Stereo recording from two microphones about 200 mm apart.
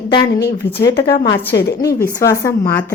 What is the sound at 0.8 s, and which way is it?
A woman's voice, 55° left (ahead or behind).